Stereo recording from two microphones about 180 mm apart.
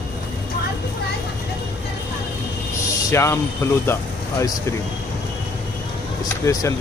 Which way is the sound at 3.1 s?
15° left (ahead or behind).